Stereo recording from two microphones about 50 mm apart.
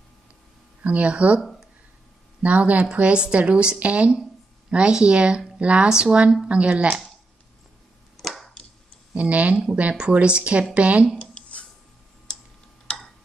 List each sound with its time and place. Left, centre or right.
0.8 s speech: right
2.4 s speech: right
8.2 s a sound: centre
9.1 s speech: right
11.1 s a sound: left
12.9 s tick-tock: centre